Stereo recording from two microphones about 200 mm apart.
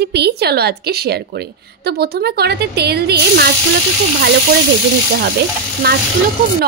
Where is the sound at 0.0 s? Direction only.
55° right (ahead or behind).